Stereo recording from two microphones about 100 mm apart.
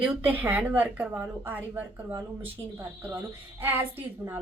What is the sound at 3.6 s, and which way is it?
Speech, 20° right (ahead or behind).